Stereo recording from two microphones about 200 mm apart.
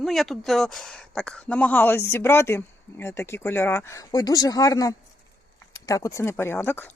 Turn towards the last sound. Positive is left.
turn(degrees=10)  # may be behind; listen again after turning